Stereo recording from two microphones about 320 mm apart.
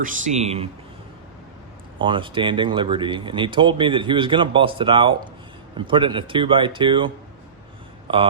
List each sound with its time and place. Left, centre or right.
0.0 s speech: right
2.0 s speech: centre